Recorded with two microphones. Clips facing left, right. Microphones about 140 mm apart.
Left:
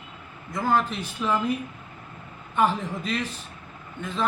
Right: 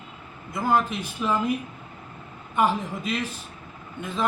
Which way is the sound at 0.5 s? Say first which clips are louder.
Right 1 dB; 10° right (ahead or behind).